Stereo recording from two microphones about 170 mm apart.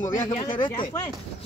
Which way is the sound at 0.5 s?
30° left (ahead or behind).